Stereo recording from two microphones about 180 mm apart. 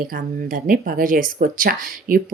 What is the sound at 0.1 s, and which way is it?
Speech, 50° right (ahead or behind).